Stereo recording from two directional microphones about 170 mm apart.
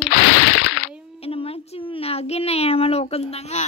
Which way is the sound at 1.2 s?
35° left (ahead or behind).